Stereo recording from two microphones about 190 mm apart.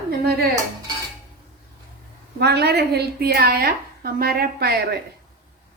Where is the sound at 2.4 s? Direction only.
60° right (ahead or behind).